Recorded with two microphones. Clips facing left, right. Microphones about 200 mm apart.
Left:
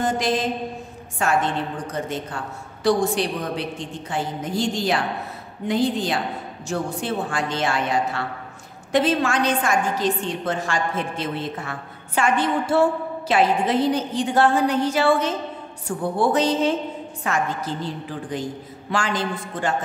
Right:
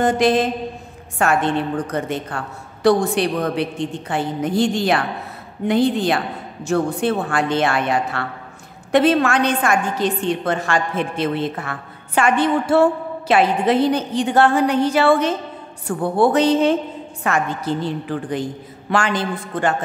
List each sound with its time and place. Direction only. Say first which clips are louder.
0.0 s a woman's voice: right 6 dB; 60° right (ahead or behind)